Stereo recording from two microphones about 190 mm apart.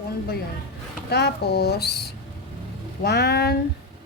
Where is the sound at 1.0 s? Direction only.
60° left (ahead or behind).